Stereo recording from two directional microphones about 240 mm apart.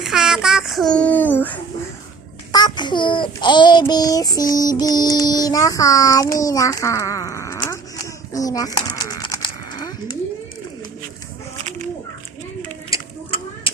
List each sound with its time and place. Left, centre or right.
0.0 s a child's voice: centre
2.5 s child singing: centre
12.9 s a sound: left